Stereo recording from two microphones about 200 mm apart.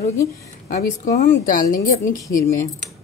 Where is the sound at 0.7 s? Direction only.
35° left (ahead or behind).